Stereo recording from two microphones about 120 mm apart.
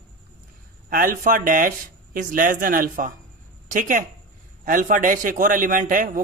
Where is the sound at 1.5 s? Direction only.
90° right.